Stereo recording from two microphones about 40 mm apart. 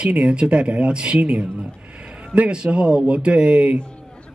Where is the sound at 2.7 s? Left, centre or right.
Right.